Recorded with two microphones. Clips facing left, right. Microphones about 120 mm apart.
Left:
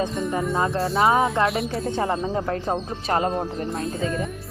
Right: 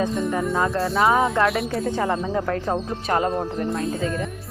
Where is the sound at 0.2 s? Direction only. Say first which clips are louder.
Right 1 dB; centre (ahead or behind).